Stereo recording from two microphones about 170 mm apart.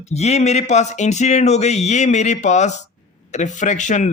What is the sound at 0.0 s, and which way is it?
A man's voice, 40° left (ahead or behind).